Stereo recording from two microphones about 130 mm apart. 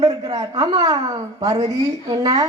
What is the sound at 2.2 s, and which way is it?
Speech, 30° right (ahead or behind).